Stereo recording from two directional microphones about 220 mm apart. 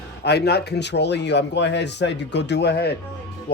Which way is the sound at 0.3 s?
50° left (ahead or behind).